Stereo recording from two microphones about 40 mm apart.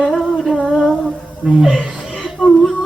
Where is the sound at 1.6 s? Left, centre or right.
Centre.